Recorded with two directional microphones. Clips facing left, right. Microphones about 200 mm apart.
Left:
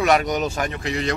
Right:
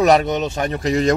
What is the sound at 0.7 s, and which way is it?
Speech, 40° right (ahead or behind).